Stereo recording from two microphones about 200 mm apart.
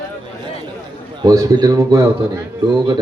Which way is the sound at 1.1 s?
20° right (ahead or behind).